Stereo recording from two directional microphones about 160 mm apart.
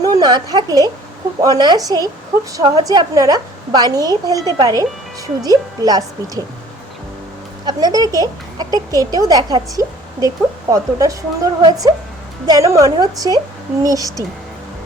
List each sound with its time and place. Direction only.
0.0 s a woman's voice: 25° right (ahead or behind)
7.6 s speech: 25° right (ahead or behind)